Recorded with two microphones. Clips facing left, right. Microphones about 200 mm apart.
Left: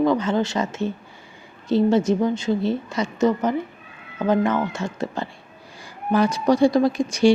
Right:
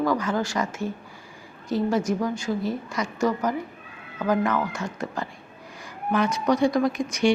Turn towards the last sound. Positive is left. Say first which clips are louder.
# left 5 dB
turn(degrees=30)  # may be behind; listen again after turning